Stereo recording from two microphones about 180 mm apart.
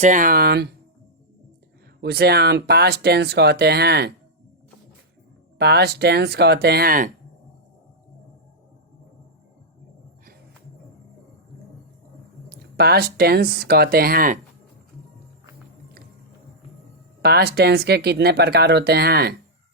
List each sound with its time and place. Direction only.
0.0 s speech: 45° right (ahead or behind); by 0.7 s 60° right (ahead or behind)
2.0 s speech: 65° right (ahead or behind)
5.5 s speech: 65° right (ahead or behind)
12.5 s speech: 60° right (ahead or behind)
17.2 s speech: 60° right (ahead or behind)